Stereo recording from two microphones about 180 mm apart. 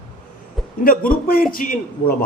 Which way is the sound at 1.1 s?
55° left (ahead or behind).